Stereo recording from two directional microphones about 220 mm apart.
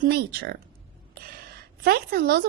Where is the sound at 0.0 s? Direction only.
45° right (ahead or behind).